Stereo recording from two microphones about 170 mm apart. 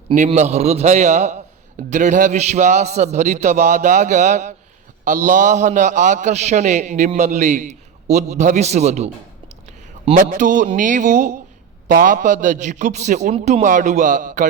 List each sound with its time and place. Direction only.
0.3 s a man's voice: 40° right (ahead or behind)